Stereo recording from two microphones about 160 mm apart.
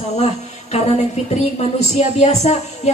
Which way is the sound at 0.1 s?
45° left (ahead or behind).